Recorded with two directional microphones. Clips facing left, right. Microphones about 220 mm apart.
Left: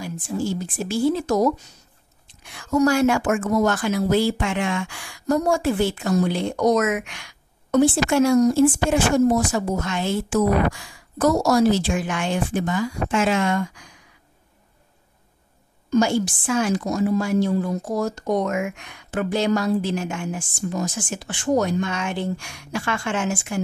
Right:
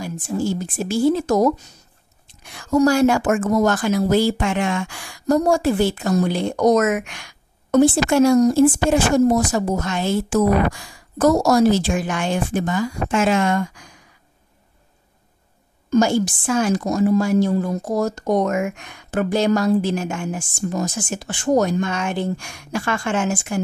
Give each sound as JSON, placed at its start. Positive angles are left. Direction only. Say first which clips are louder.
{"t": 0.0, "sound": "a woman's voice", "louder": "right 3 dB", "side_deg": -45}
{"t": 15.9, "sound": "a woman's voice", "louder": "right 2 dB", "side_deg": -45}